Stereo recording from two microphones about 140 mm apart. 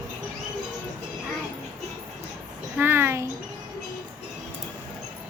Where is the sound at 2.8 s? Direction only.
15° right (ahead or behind).